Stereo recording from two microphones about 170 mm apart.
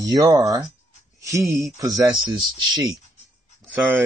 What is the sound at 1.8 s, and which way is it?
Speech, 20° right (ahead or behind).